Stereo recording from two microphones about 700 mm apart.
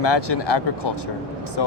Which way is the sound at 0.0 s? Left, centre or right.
Left.